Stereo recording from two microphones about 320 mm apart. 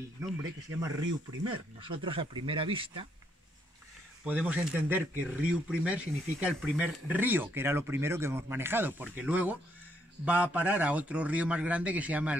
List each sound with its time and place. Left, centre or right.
0.2 s speech: centre
4.2 s a man's voice: centre